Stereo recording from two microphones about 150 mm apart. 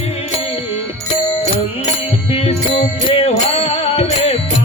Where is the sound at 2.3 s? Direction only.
40° left (ahead or behind).